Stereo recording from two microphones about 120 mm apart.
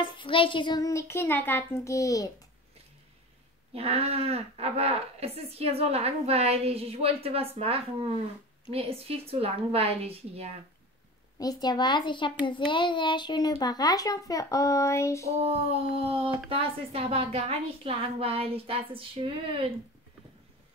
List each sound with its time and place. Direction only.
0.0 s a child's voice: 45° left (ahead or behind); by 2.3 s 30° left (ahead or behind)
3.7 s speech: 55° right (ahead or behind)
11.3 s a child's voice: 35° left (ahead or behind)
15.4 s speech: 55° right (ahead or behind)